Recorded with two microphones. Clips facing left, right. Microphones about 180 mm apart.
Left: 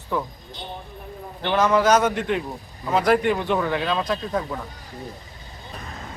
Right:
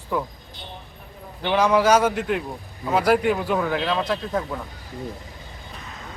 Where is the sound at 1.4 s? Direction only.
10° right (ahead or behind).